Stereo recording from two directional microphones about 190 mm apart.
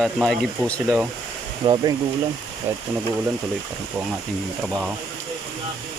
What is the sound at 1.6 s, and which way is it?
Speech, 25° right (ahead or behind).